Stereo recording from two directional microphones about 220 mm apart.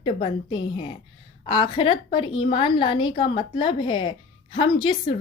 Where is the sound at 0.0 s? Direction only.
25° left (ahead or behind).